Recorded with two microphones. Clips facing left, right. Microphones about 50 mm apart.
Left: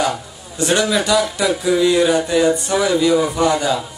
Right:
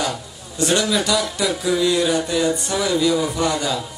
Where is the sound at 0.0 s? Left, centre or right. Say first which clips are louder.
Left 5 dB; centre.